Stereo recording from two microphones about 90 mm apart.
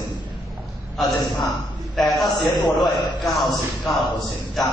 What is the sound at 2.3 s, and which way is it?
Speech, 55° left (ahead or behind).